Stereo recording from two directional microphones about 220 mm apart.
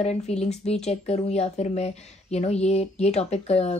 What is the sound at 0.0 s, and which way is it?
Speech, 30° left (ahead or behind).